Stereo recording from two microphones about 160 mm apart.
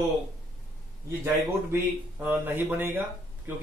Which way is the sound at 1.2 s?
15° right (ahead or behind).